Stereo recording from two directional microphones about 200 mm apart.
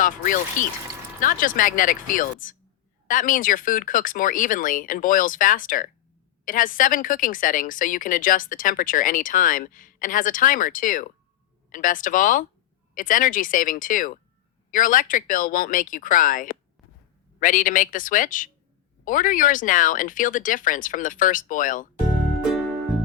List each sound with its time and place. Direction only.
0.6 s speech: 40° left (ahead or behind)